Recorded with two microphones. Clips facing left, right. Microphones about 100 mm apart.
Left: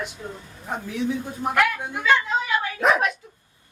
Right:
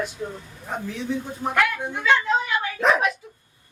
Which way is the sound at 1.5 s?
5° left (ahead or behind).